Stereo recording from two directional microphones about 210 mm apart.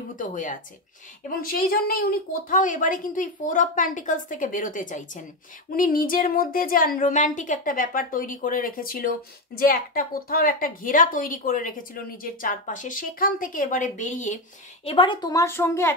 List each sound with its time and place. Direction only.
0.1 s a woman's voice: 40° left (ahead or behind)
14.9 s a woman's voice: 25° left (ahead or behind)